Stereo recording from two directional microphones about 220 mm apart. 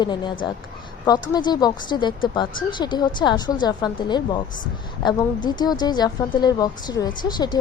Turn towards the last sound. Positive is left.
turn(degrees=20)  # may be behind; listen again after turning